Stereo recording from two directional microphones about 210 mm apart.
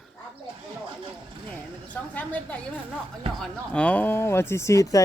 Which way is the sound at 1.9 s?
5° left (ahead or behind).